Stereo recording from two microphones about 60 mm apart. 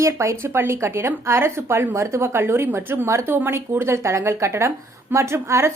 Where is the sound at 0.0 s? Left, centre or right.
Right.